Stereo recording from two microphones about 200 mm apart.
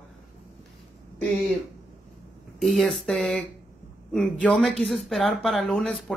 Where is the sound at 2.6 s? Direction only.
Centre (ahead or behind).